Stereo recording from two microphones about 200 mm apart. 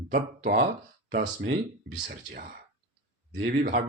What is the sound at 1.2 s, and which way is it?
Speech, 65° right (ahead or behind).